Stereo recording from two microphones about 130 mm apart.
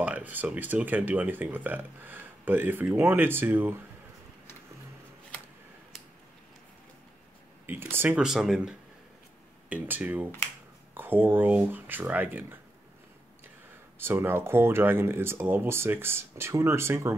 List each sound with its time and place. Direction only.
0.0 s speech: 10° right (ahead or behind)
7.6 s speech: 15° right (ahead or behind)
8.2 s speech: 5° right (ahead or behind)
13.9 s speech: 15° right (ahead or behind)